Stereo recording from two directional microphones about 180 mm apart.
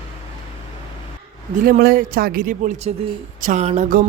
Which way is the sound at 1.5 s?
50° right (ahead or behind).